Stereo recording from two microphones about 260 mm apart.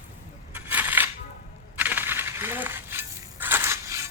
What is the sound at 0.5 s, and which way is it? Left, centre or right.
Coin, centre.